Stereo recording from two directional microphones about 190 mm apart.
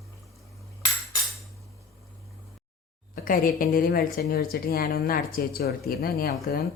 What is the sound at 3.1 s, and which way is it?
A woman's voice, 45° left (ahead or behind).